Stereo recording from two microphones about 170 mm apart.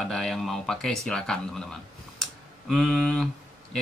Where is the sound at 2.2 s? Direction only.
Centre (ahead or behind).